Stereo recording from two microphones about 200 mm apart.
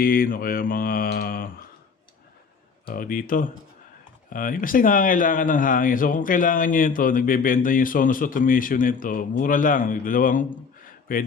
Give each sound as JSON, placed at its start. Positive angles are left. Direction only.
{"t": 0.0, "sound": "speech", "side_deg": 45}
{"t": 2.8, "sound": "speech", "side_deg": 45}